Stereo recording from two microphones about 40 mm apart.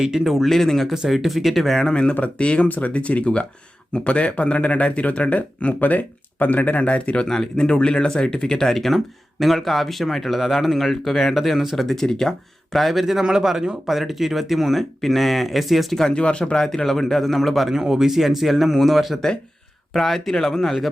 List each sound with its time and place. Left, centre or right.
0.3 s speech: centre
1.9 s speech: left
7.3 s a man's voice: centre
11.9 s a man's voice: centre
12.7 s a man's voice: centre
16.1 s speech: left
16.6 s a man's voice: centre
17.7 s a man's voice: centre